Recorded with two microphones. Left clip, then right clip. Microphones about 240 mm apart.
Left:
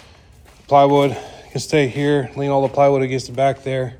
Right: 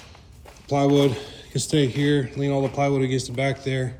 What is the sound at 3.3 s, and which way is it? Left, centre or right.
Speech, centre.